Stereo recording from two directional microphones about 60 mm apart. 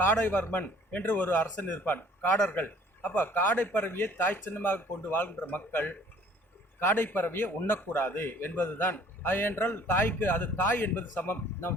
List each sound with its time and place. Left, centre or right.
0.0 s a man's voice: left